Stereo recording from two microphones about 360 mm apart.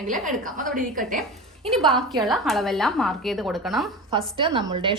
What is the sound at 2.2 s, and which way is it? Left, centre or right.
Speech, centre.